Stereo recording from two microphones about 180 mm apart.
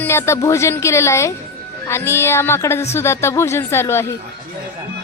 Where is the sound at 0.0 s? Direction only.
15° left (ahead or behind).